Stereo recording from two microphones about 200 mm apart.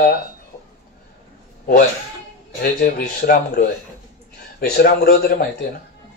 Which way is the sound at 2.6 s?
45° left (ahead or behind).